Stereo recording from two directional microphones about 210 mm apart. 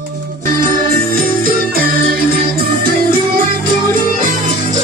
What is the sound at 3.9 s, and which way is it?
Music, 40° right (ahead or behind).